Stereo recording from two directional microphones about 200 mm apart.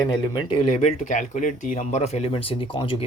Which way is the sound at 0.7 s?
35° left (ahead or behind).